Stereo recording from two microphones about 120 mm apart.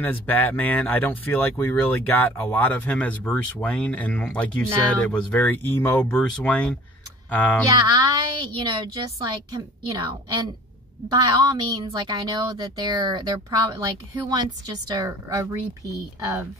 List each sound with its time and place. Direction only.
0.0 s speech: 15° left (ahead or behind)
7.6 s a woman's voice: 35° right (ahead or behind)